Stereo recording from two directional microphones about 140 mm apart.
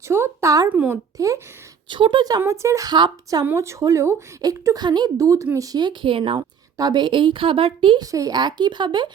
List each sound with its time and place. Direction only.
0.1 s a woman's voice: 20° right (ahead or behind)
0.7 s speech: 10° right (ahead or behind)
1.2 s a woman's voice: 25° right (ahead or behind)
1.9 s a woman's voice: 35° right (ahead or behind)
3.4 s a woman's voice: 20° right (ahead or behind)